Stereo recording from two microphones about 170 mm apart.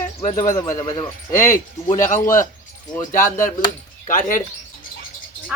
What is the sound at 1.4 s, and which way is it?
A child's voice, 50° left (ahead or behind).